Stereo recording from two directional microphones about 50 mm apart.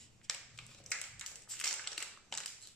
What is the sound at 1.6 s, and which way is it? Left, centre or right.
Crushing, centre.